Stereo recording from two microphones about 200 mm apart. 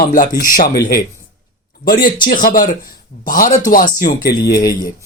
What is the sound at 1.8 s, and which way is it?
Speech, 45° left (ahead or behind).